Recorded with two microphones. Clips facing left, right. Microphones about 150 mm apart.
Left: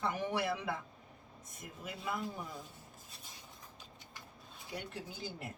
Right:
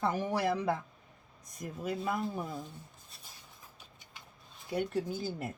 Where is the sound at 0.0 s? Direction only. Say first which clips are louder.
Right 4 dB; 40° right (ahead or behind).